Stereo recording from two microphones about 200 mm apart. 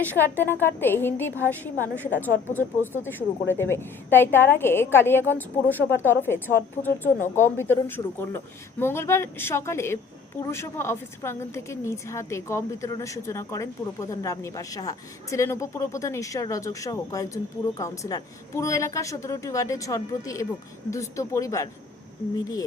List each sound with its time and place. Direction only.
0.0 s a woman's voice: 10° left (ahead or behind)